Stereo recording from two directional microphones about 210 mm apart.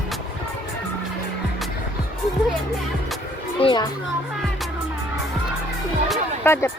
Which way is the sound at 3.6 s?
25° left (ahead or behind).